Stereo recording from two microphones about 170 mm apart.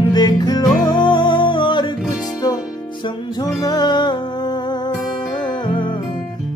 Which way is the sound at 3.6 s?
25° left (ahead or behind).